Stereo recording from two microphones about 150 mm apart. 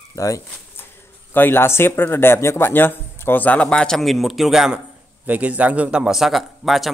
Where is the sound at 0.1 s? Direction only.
20° left (ahead or behind).